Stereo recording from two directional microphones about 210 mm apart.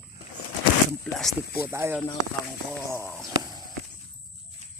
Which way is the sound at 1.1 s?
5° left (ahead or behind).